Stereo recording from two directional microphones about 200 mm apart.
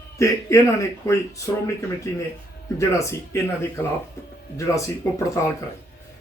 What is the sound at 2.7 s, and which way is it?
Speech, 15° left (ahead or behind).